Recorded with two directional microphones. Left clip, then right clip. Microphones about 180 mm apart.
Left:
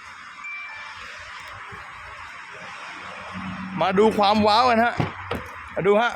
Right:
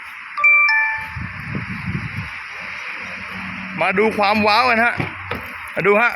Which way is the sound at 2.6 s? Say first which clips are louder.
Right 7 dB; centre (ahead or behind).